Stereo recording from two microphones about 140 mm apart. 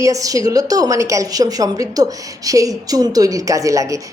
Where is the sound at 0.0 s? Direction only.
25° right (ahead or behind).